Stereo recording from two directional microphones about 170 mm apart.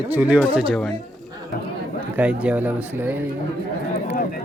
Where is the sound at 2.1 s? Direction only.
10° right (ahead or behind).